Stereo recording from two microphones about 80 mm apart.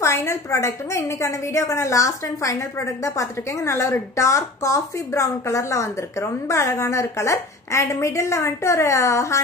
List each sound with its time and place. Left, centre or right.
0.0 s a woman's voice: left